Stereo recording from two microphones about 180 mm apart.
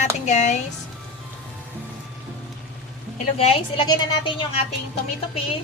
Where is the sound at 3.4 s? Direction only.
30° left (ahead or behind).